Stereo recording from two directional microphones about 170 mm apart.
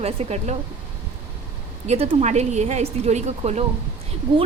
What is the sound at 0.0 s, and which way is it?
Speech, 40° right (ahead or behind).